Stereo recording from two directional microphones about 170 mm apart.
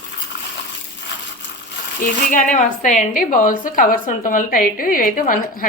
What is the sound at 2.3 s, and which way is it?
A woman's voice, 50° left (ahead or behind).